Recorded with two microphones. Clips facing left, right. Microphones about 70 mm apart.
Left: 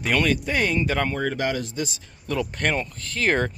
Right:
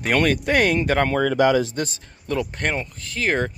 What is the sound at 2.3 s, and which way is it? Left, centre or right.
Speech, right.